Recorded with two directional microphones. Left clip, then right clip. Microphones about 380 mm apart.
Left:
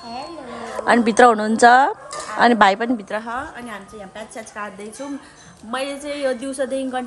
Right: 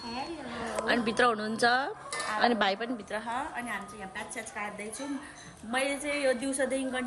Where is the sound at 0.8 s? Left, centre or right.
Right.